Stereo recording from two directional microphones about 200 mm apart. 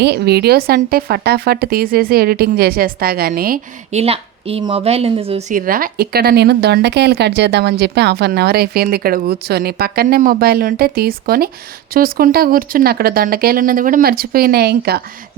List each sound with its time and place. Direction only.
0.0 s a woman's voice: 55° right (ahead or behind)
3.9 s a woman's voice: 30° right (ahead or behind)
5.5 s a woman's voice: 45° right (ahead or behind)